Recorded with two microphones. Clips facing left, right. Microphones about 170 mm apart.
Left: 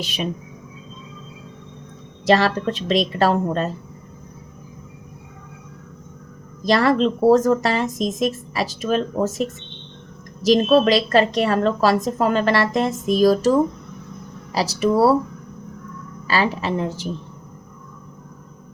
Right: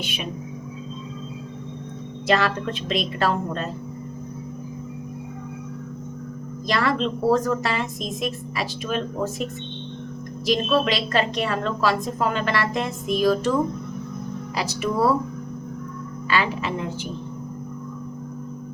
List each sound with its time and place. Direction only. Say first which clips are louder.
2.2 s speech: left 5 dB; 35° left (ahead or behind)
6.7 s speech: left 6 dB; 40° left (ahead or behind)
16.2 s speech: left 3 dB; 35° left (ahead or behind)